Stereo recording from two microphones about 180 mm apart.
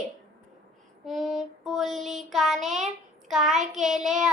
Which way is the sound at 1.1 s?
Centre (ahead or behind).